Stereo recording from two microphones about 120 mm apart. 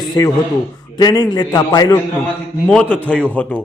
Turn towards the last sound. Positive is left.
turn(degrees=15)  # may be behind; listen again after turning